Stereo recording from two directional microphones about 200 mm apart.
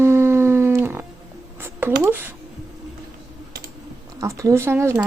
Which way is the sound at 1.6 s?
10° right (ahead or behind).